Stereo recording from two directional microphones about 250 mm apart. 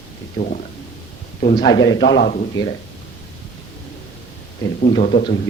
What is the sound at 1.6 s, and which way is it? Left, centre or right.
Speech, centre.